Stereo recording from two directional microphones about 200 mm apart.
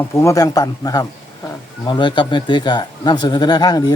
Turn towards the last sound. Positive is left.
turn(degrees=20)  # may be behind; listen again after turning